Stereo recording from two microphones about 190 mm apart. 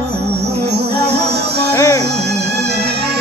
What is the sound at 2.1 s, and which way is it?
Music, 60° right (ahead or behind).